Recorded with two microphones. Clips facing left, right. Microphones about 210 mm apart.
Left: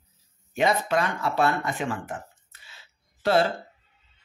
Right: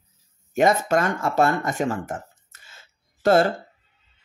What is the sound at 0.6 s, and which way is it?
Speech, 45° right (ahead or behind).